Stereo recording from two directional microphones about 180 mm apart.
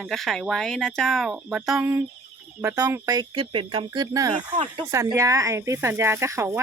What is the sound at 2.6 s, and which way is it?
Speech, 15° right (ahead or behind).